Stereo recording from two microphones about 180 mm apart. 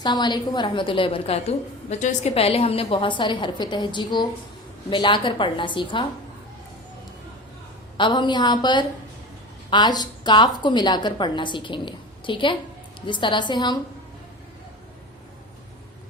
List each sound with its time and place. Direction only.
0.0 s a woman's voice: 25° left (ahead or behind)
7.9 s a woman's voice: 25° left (ahead or behind)